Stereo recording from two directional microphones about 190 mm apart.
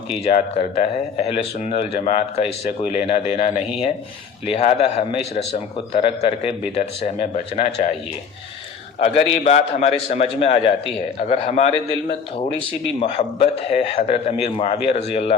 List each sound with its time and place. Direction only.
0.2 s speech: 30° left (ahead or behind)
9.1 s speech: 35° left (ahead or behind)